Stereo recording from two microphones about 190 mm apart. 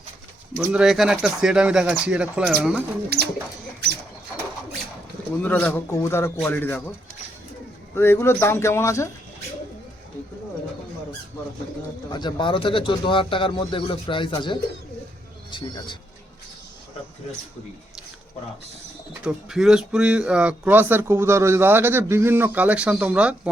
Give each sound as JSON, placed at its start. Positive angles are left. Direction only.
{"t": 0.5, "sound": "speech", "side_deg": -5}
{"t": 3.1, "sound": "bird", "side_deg": -55}
{"t": 5.4, "sound": "a man's voice", "side_deg": 10}
{"t": 7.9, "sound": "a man's voice", "side_deg": 10}
{"t": 12.1, "sound": "speech", "side_deg": 25}
{"t": 19.2, "sound": "speech", "side_deg": -5}